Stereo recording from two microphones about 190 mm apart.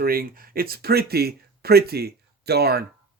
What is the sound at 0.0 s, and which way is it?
Speech, 50° right (ahead or behind).